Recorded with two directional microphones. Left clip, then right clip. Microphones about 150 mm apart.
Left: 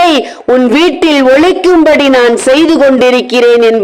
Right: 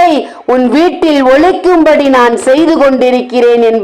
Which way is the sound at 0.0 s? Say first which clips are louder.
Even; 25° left (ahead or behind).